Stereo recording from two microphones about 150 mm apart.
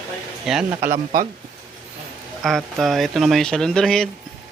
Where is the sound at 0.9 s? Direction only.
60° right (ahead or behind).